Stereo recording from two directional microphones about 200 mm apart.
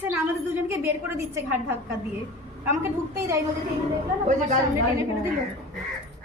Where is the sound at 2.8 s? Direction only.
15° right (ahead or behind).